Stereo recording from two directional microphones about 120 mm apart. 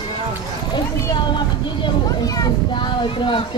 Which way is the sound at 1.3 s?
35° left (ahead or behind).